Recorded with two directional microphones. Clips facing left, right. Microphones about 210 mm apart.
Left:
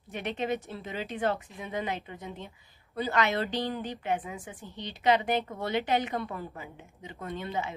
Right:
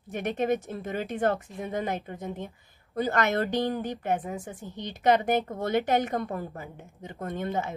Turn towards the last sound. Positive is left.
turn(degrees=-50)  # may be behind; listen again after turning